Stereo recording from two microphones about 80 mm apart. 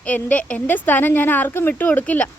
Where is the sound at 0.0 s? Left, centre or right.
Centre.